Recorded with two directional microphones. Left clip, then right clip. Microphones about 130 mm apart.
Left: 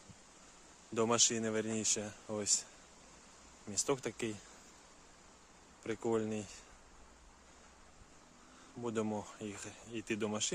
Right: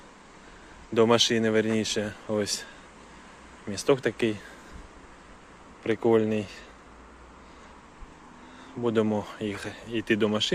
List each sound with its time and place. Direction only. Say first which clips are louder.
0.9 s speech: right 11 dB; 15° left (ahead or behind)
3.7 s speech: right 12 dB; 25° left (ahead or behind)
5.8 s speech: right 13 dB; 15° left (ahead or behind)
8.8 s speech: right 13 dB; 10° left (ahead or behind)